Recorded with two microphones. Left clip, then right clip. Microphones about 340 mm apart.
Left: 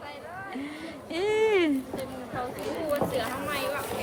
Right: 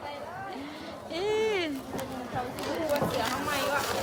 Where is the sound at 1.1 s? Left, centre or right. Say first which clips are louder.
Left 4 dB; centre.